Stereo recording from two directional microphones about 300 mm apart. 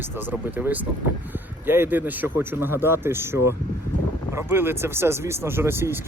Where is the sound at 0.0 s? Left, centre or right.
Centre.